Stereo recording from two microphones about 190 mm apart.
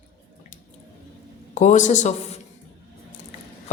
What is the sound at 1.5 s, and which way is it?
Speech, 40° left (ahead or behind).